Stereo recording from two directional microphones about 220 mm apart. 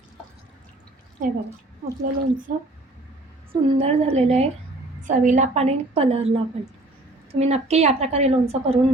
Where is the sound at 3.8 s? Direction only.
30° right (ahead or behind).